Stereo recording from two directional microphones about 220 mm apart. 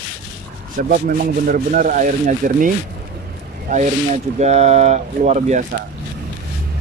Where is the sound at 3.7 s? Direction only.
30° right (ahead or behind).